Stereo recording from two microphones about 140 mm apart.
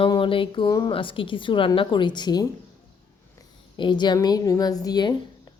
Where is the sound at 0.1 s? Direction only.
40° left (ahead or behind).